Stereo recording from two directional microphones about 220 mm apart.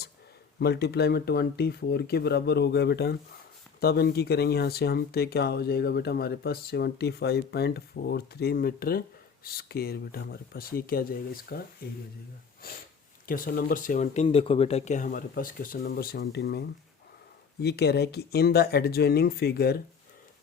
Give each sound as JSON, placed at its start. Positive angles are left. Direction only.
{"t": 0.6, "sound": "speech", "side_deg": 45}
{"t": 13.2, "sound": "speech", "side_deg": 40}